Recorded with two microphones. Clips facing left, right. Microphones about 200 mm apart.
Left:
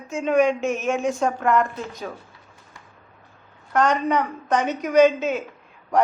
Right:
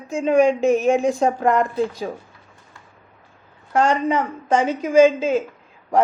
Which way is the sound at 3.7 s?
30° right (ahead or behind).